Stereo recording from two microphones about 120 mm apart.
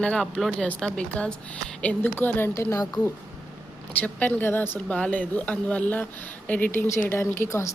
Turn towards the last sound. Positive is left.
turn(degrees=25)  # may be behind; listen again after turning